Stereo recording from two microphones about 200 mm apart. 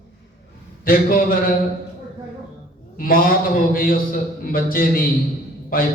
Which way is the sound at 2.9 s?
45° left (ahead or behind).